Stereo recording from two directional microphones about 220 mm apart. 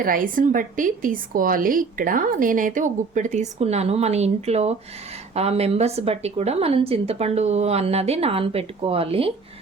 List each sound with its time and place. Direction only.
0.0 s a woman's voice: 40° right (ahead or behind)